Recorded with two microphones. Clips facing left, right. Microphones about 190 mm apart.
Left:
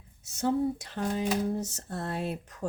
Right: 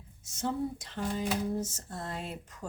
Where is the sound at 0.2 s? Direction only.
65° left (ahead or behind).